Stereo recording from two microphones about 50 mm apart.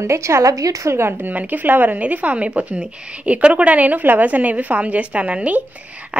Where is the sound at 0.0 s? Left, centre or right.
Right.